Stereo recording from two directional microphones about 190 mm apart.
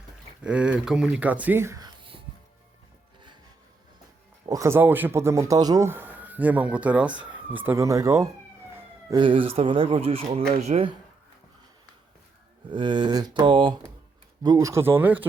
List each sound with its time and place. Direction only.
0.4 s speech: 5° right (ahead or behind)
4.4 s speech: 15° right (ahead or behind); by 10.9 s 35° right (ahead or behind)
12.7 s speech: 25° right (ahead or behind)